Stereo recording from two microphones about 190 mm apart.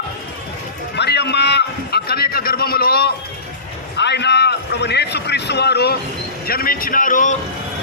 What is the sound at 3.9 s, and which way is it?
A man's voice, 65° left (ahead or behind).